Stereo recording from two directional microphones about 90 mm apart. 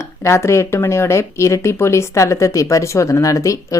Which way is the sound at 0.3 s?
30° left (ahead or behind).